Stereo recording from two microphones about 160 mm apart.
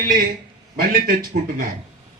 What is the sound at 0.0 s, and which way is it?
Speech, 65° right (ahead or behind).